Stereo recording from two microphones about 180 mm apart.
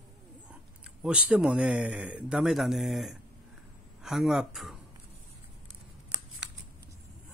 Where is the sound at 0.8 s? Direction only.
5° right (ahead or behind).